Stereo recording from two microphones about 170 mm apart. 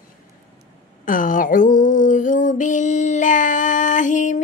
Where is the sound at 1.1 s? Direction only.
50° left (ahead or behind).